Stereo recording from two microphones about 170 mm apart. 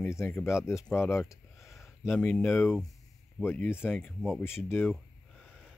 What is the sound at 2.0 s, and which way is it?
Speech, 5° left (ahead or behind).